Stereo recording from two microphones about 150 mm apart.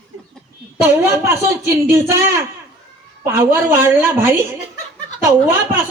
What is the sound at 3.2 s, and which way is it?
A woman's voice, 15° right (ahead or behind).